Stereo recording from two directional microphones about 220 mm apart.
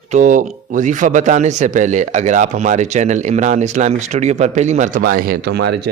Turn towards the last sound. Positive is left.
turn(degrees=-50)  # may be behind; listen again after turning